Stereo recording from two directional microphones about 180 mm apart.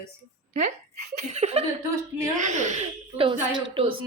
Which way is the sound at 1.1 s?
40° right (ahead or behind).